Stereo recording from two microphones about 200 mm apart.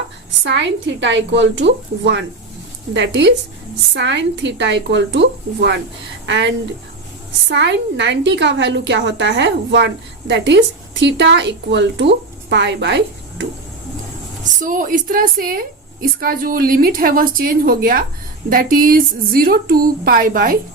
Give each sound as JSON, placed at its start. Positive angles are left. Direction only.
{"t": 0.4, "sound": "a woman's voice", "side_deg": -60}
{"t": 7.5, "sound": "a woman's voice", "side_deg": -60}
{"t": 14.6, "sound": "a woman's voice", "side_deg": -40}